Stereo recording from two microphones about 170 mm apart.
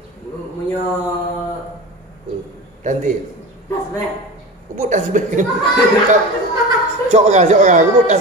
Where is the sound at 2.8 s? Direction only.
45° right (ahead or behind).